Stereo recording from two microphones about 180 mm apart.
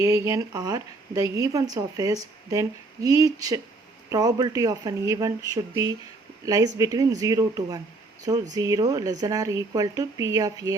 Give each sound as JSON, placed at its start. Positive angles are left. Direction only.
{"t": 0.0, "sound": "a woman's voice", "side_deg": -15}